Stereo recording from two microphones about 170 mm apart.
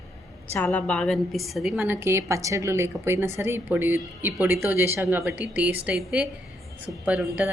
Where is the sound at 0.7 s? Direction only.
5° left (ahead or behind).